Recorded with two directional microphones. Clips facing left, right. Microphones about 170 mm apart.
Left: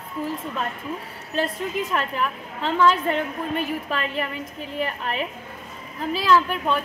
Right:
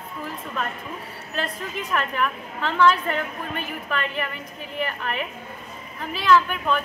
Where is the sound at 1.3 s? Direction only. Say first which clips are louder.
Left 5 dB; 25° left (ahead or behind).